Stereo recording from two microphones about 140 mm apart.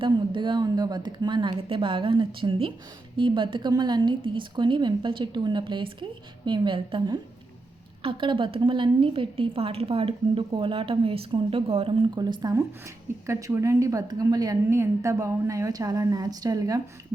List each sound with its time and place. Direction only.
0.0 s a woman's voice: 35° right (ahead or behind)